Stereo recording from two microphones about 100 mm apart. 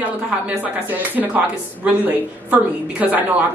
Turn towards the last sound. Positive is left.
turn(degrees=-15)  # may be behind; listen again after turning